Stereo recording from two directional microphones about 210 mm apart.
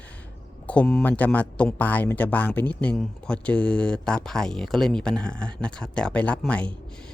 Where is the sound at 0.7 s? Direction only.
5° left (ahead or behind).